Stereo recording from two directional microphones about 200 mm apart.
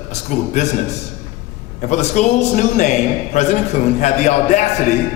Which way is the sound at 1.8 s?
35° left (ahead or behind).